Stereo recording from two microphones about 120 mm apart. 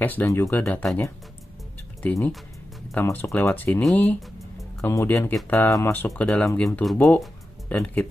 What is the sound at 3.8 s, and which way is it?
Speech, 5° left (ahead or behind).